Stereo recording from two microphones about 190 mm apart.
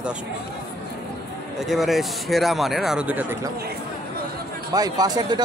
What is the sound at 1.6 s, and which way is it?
Speech, centre (ahead or behind).